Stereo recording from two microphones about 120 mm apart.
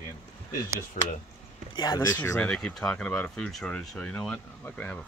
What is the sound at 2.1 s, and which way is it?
Speech, 20° left (ahead or behind).